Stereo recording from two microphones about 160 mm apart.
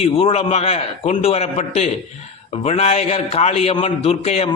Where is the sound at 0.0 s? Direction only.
40° left (ahead or behind).